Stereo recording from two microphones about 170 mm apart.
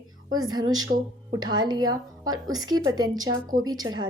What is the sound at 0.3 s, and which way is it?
A woman's voice, 25° right (ahead or behind).